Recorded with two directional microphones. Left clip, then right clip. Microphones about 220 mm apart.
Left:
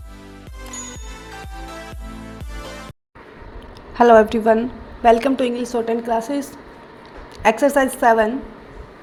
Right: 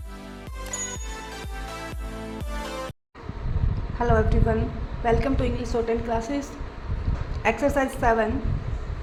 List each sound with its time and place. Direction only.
3.9 s a woman's voice: 35° left (ahead or behind)